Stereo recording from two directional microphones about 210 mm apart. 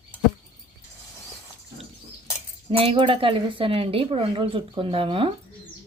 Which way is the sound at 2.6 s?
25° right (ahead or behind).